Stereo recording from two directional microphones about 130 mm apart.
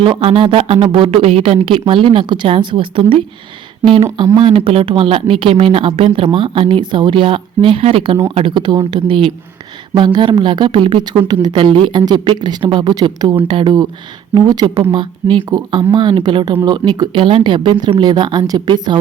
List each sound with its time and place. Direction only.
0.0 s speech: 45° right (ahead or behind)
4.4 s speech: 45° right (ahead or behind)